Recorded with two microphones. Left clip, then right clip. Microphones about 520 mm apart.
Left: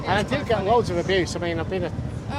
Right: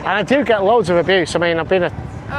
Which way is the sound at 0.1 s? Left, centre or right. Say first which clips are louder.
Right 8 dB; right.